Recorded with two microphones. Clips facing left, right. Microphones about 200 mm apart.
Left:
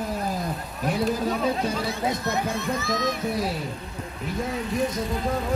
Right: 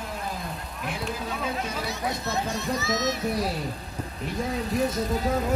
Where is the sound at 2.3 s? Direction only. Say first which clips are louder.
Left 2 dB; 55° left (ahead or behind).